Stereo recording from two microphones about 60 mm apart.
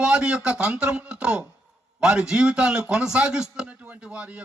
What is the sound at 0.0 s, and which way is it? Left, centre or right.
A man's voice, centre.